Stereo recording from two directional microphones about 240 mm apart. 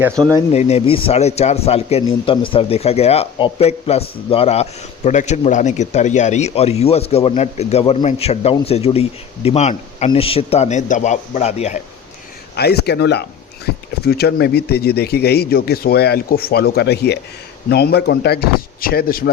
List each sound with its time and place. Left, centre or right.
0.5 s a man's voice: left
12.5 s speech: left